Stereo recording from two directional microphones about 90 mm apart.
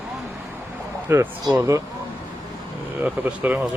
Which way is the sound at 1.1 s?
25° right (ahead or behind).